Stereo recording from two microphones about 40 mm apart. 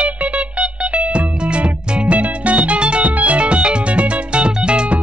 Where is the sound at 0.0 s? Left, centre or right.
Right.